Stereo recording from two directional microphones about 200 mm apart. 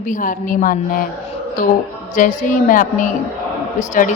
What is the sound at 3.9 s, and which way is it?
Speech, 40° left (ahead or behind).